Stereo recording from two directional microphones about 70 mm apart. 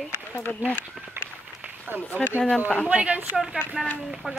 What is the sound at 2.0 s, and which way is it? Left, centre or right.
Speech, left.